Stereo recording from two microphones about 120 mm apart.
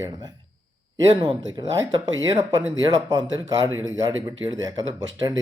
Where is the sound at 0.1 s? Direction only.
35° right (ahead or behind).